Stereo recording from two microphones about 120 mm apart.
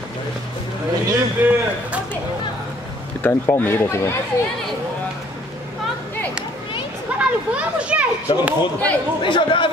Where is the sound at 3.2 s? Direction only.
15° left (ahead or behind).